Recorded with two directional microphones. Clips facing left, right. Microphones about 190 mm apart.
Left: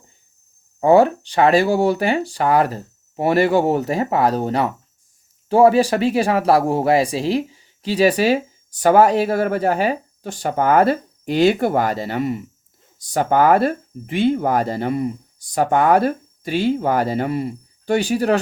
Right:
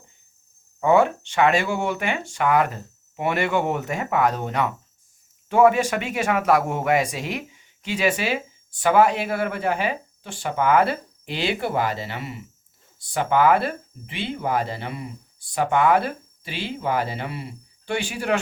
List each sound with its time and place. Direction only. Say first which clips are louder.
0.8 s speech: left 5 dB; 35° left (ahead or behind)